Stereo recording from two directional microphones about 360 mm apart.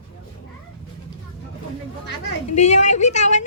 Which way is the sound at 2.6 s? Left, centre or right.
Centre.